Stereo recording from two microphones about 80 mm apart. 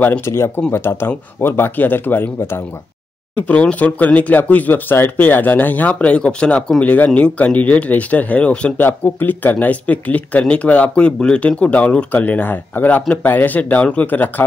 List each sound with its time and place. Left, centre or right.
0.2 s speech: left
3.3 s speech: centre